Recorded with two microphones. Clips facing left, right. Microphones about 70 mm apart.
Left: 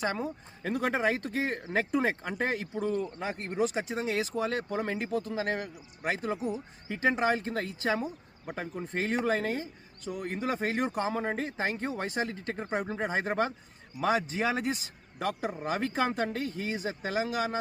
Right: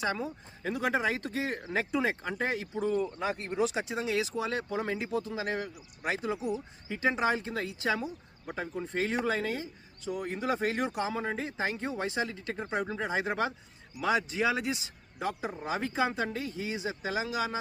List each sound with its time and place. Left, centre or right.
0.0 s speech: left